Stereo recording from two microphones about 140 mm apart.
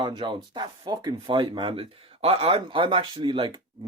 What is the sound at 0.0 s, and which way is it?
Speech, 35° right (ahead or behind).